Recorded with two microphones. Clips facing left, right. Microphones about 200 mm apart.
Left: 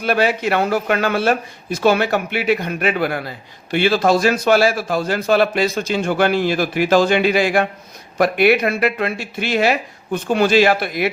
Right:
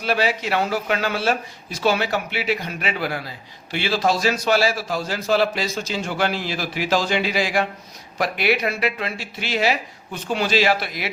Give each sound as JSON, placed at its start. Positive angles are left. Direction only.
{"t": 0.0, "sound": "speech", "side_deg": 55}